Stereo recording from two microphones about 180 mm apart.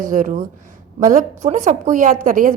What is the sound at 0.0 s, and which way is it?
A woman's voice, 45° right (ahead or behind).